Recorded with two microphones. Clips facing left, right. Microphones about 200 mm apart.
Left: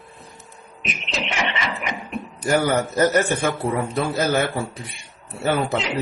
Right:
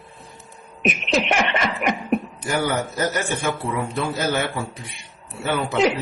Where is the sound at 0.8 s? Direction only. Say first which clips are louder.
Right 8 dB; 55° right (ahead or behind).